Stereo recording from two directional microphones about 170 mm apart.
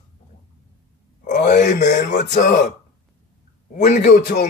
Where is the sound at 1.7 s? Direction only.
80° left.